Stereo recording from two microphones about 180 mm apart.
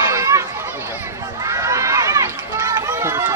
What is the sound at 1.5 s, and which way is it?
Run, 20° right (ahead or behind).